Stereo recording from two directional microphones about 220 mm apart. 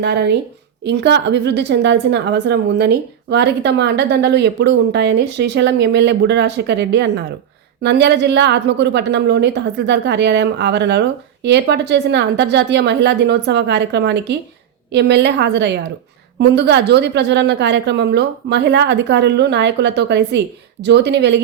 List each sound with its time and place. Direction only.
0.0 s a woman's voice: 50° right (ahead or behind)